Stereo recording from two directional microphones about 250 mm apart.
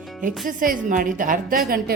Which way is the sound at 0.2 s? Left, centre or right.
Right.